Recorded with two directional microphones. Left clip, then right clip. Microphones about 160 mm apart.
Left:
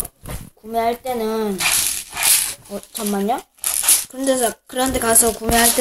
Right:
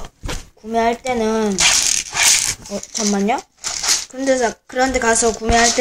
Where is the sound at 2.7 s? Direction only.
15° right (ahead or behind).